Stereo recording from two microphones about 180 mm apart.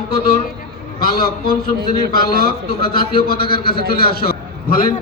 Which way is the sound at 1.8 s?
60° right (ahead or behind).